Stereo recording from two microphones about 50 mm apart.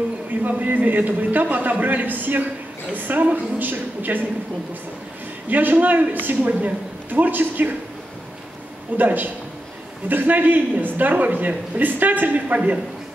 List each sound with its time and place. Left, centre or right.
0.4 s a man's voice: right
5.5 s a man's voice: right
8.9 s a man's voice: right